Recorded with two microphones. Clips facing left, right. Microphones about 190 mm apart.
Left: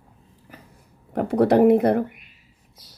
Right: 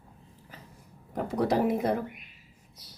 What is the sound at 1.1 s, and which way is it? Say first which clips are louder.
Speech: left 9 dB; 65° left (ahead or behind).